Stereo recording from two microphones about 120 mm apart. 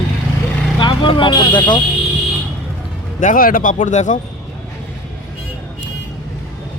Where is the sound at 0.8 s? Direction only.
45° left (ahead or behind).